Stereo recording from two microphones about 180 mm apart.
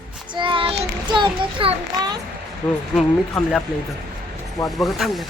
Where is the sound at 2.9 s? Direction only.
Centre (ahead or behind).